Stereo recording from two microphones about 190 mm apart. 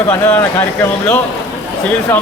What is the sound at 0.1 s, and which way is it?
Speech, 20° left (ahead or behind).